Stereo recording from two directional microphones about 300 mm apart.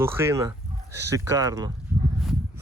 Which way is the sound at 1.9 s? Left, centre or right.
Centre.